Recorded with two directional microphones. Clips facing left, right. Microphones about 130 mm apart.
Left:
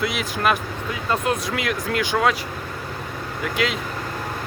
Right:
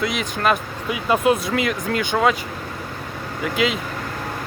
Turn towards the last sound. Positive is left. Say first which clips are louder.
# right 3 dB
turn(degrees=0)  # may be behind; listen again after turning